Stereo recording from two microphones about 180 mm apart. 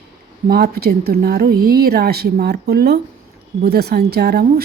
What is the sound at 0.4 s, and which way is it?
A woman's voice, 60° right (ahead or behind).